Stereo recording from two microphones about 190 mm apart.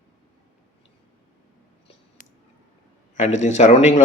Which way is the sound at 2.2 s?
45° left (ahead or behind).